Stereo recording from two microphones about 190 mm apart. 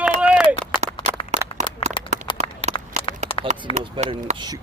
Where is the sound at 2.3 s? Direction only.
20° left (ahead or behind).